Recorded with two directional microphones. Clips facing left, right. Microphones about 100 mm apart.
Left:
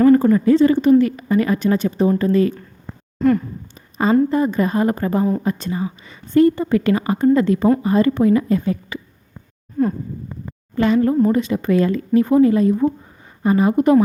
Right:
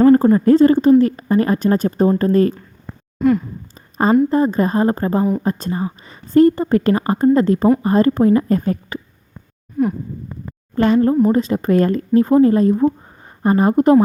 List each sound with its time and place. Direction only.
0.0 s a woman's voice: 25° right (ahead or behind)
3.2 s speech: 15° right (ahead or behind)
4.3 s a woman's voice: 40° right (ahead or behind)
9.8 s a sound: 15° right (ahead or behind)
10.8 s a woman's voice: 40° right (ahead or behind)
11.1 s speech: 25° right (ahead or behind)
11.3 s a woman's voice: 40° right (ahead or behind)